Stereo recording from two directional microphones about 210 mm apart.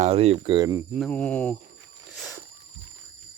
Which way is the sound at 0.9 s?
5° left (ahead or behind).